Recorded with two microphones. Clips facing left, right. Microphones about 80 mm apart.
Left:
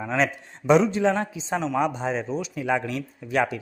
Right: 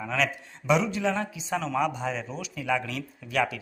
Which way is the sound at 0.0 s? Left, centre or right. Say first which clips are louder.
Left 4 dB; left.